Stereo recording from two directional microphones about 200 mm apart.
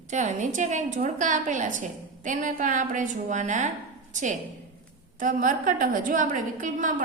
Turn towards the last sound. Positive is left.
turn(degrees=-40)  # may be behind; listen again after turning